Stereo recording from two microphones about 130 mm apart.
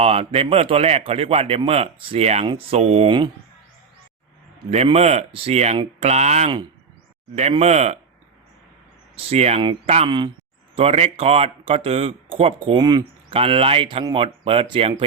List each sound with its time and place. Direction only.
0.0 s speech: 50° right (ahead or behind)
4.7 s speech: 55° right (ahead or behind)
7.5 s speech: 55° right (ahead or behind)
9.1 s speech: 50° right (ahead or behind)
10.1 s speech: 35° right (ahead or behind)
10.8 s speech: 50° right (ahead or behind); by 13.1 s 30° right (ahead or behind)
13.3 s speech: 45° right (ahead or behind)